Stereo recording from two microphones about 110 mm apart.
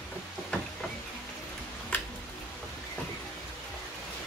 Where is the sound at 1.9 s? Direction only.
15° left (ahead or behind).